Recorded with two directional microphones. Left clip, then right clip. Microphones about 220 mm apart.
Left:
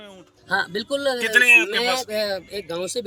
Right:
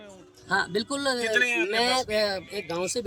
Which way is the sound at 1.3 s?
55° left (ahead or behind).